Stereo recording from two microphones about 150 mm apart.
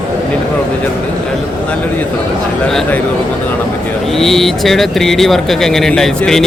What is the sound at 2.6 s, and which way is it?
Speech, 5° left (ahead or behind).